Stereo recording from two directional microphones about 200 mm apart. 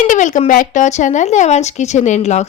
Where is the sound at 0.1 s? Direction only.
40° left (ahead or behind).